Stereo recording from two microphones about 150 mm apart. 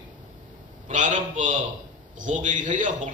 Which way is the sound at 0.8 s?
55° right (ahead or behind).